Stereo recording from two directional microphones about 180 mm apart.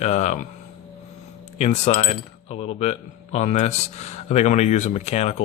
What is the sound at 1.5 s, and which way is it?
Speech, 40° left (ahead or behind).